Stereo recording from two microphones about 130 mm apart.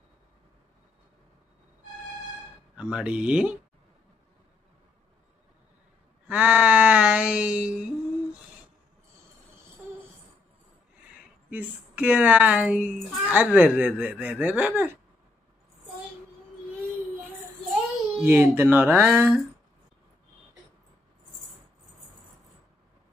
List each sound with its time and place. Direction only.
2.8 s speech: 5° right (ahead or behind)
6.2 s a sound: 10° right (ahead or behind)
11.5 s speech: 10° right (ahead or behind)
18.2 s speech: 15° right (ahead or behind)